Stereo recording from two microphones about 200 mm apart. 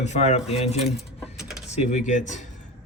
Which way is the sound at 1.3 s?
Centre (ahead or behind).